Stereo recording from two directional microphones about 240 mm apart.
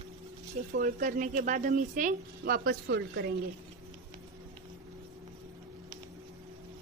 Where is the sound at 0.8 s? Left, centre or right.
Right.